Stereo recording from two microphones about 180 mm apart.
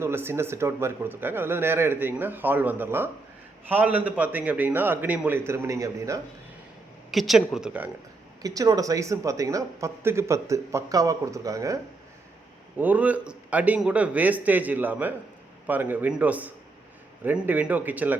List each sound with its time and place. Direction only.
0.0 s speech: 15° right (ahead or behind)
7.1 s speech: centre (ahead or behind)
8.4 s speech: 20° right (ahead or behind)
12.8 s speech: 10° right (ahead or behind)